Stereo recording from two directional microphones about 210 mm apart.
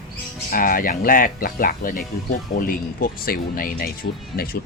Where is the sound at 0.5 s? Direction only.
40° left (ahead or behind).